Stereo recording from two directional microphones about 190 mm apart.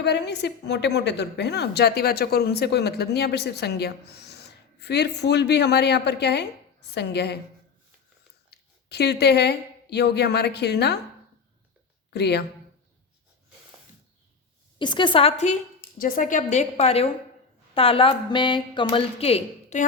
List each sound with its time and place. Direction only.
0.0 s a woman's voice: 65° left (ahead or behind)
8.4 s a woman's voice: 60° left (ahead or behind)
12.1 s a woman's voice: 60° left (ahead or behind)
14.8 s speech: 25° left (ahead or behind)
16.0 s a woman's voice: 45° left (ahead or behind)